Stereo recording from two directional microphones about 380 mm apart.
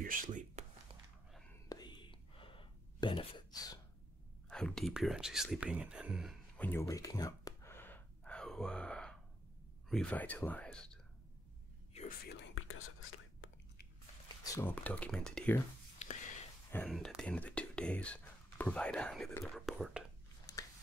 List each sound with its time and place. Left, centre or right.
0.0 s whispering: right
1.3 s whispering: centre
4.5 s speech: centre
11.9 s whispering: left
14.4 s speech: centre
16.7 s speech: centre
20.5 s a sound: centre